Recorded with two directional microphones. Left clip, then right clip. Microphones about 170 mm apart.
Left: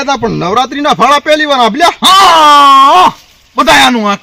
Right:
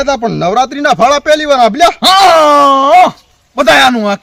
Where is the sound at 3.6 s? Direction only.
40° right (ahead or behind).